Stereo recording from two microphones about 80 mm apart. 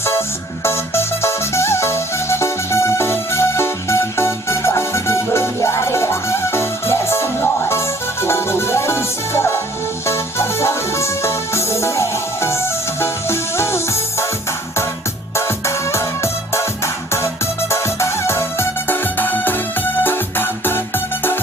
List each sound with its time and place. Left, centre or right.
0.6 s music: left
15.4 s music: left